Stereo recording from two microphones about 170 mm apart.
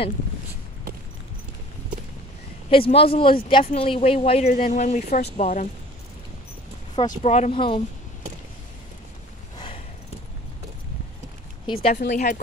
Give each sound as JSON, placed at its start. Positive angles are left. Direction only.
{"t": 2.7, "sound": "speech", "side_deg": 35}
{"t": 7.1, "sound": "speech", "side_deg": 40}
{"t": 11.6, "sound": "speech", "side_deg": 30}
{"t": 12.1, "sound": "speech", "side_deg": 45}